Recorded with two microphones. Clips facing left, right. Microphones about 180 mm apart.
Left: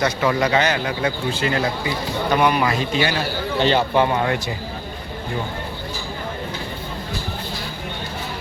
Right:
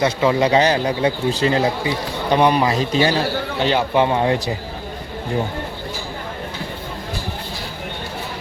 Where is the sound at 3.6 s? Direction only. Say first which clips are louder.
Left 1 dB; 10° right (ahead or behind).